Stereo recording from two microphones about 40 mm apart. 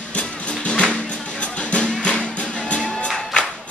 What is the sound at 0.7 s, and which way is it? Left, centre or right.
Music, left.